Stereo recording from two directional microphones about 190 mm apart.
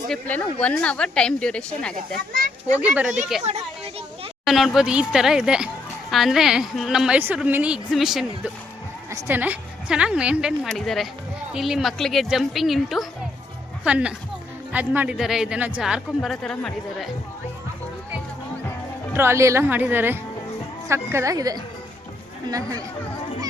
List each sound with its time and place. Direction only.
0.1 s speech: 10° left (ahead or behind)
2.7 s a woman's voice: 5° right (ahead or behind)
3.4 s children playing: 30° right (ahead or behind)
4.4 s speech: centre (ahead or behind)
9.0 s a woman's voice: 15° right (ahead or behind); by 17.1 s 5° left (ahead or behind)
19.1 s a woman's voice: 15° right (ahead or behind)